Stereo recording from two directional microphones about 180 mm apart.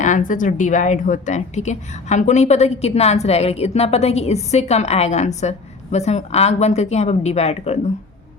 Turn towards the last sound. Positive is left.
turn(degrees=35)  # may be behind; listen again after turning